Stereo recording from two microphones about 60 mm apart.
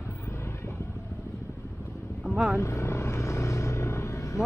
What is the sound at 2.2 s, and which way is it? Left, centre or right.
Vehicle, centre.